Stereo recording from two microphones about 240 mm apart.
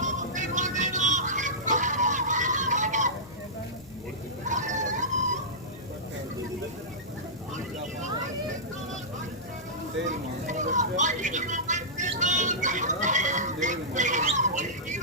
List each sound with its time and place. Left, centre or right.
0.0 s music: right
4.4 s a sound: right
10.1 s vehicle: right